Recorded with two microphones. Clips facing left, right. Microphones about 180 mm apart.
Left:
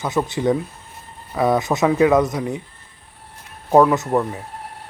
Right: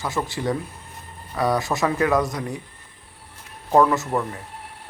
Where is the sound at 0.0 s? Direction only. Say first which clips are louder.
Left 5 dB; 20° left (ahead or behind).